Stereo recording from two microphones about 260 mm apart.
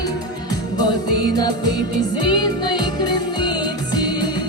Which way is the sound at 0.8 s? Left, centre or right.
Centre.